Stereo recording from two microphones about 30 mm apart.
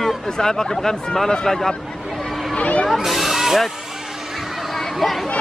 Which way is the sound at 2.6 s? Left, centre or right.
Left.